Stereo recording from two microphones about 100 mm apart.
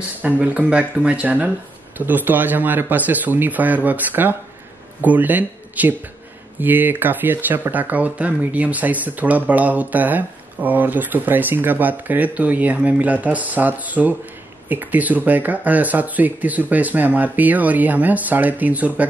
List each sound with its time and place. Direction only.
0.2 s speech: 15° right (ahead or behind)